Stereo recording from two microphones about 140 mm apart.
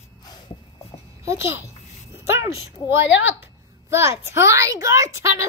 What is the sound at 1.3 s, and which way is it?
Speech, 20° right (ahead or behind).